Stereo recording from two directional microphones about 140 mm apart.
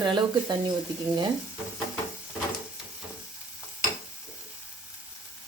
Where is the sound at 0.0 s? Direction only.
30° right (ahead or behind).